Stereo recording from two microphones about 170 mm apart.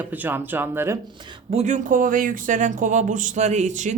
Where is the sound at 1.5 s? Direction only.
40° right (ahead or behind).